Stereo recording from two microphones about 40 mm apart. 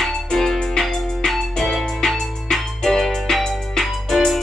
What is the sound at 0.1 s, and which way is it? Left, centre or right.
Music, centre.